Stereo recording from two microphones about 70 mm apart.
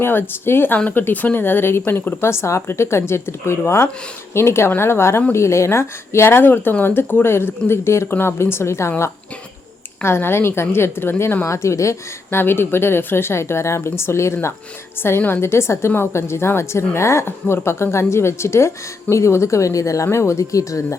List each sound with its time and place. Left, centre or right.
0.0 s speech: left
10.0 s speech: left
11.4 s speech: left
12.4 s speech: left